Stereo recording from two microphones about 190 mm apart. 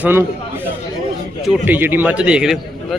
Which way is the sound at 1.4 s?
5° right (ahead or behind).